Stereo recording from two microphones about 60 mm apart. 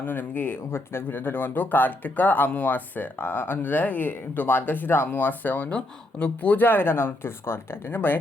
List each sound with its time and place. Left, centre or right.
0.0 s speech: left
5.7 s speech: centre; by 8.2 s left